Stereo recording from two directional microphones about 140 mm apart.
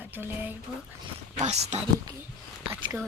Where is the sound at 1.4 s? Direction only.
55° right (ahead or behind).